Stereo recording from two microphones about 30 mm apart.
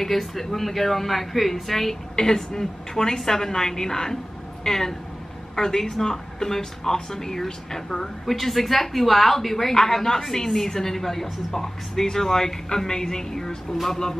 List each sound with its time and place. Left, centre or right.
0.0 s a woman's voice: centre
8.3 s a woman's voice: centre